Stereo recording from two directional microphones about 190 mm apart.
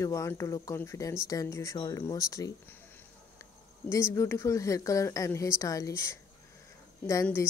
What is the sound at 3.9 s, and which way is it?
A woman's voice, 15° left (ahead or behind).